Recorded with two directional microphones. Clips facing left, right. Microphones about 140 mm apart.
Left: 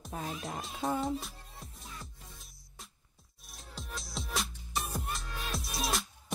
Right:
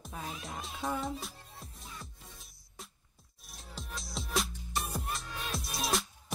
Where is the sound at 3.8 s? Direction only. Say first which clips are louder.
Even; centre (ahead or behind).